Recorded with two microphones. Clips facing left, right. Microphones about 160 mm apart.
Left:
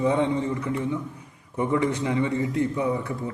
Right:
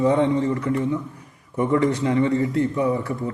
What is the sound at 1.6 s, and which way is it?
A man's voice, 15° left (ahead or behind).